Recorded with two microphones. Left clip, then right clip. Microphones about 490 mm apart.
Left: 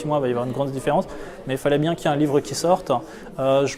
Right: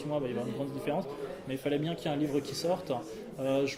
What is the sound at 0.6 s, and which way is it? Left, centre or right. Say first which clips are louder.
Speech: left 13 dB; left.